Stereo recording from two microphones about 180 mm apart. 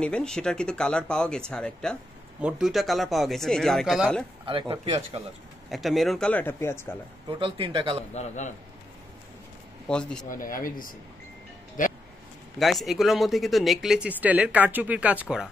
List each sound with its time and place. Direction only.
0.0 s speech: 5° left (ahead or behind)
4.5 s speech: 30° right (ahead or behind)
5.7 s speech: centre (ahead or behind)
7.2 s speech: 30° right (ahead or behind)
8.1 s a man's voice: 40° left (ahead or behind)
9.8 s speech: 5° left (ahead or behind)
10.3 s speech: 50° left (ahead or behind)
12.5 s speech: centre (ahead or behind)